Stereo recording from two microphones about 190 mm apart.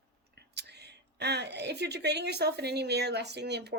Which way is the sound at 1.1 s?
60° right (ahead or behind).